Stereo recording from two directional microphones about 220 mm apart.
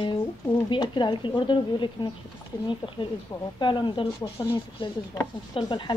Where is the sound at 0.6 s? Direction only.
20° left (ahead or behind).